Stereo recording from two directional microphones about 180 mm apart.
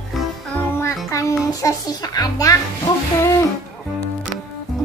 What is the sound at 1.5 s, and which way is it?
A child's voice, 20° left (ahead or behind).